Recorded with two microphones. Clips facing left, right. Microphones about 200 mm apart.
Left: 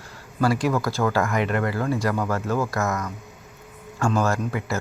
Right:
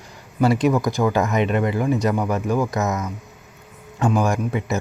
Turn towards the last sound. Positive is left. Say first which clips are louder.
# right 3 dB
turn(degrees=-15)  # may be behind; listen again after turning